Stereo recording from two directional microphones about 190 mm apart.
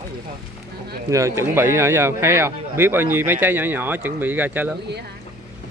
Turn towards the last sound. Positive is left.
turn(degrees=-10)  # may be behind; listen again after turning